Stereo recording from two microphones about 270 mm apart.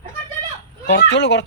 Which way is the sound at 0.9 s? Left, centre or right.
Left.